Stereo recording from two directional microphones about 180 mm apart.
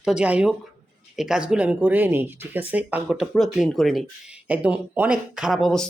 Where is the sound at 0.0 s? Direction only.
5° right (ahead or behind).